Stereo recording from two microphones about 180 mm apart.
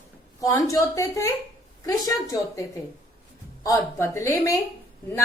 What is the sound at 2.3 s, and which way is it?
A woman's voice, 15° left (ahead or behind).